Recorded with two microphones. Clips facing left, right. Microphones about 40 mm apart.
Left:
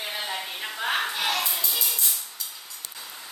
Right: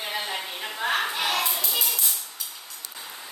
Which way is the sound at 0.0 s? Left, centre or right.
Centre.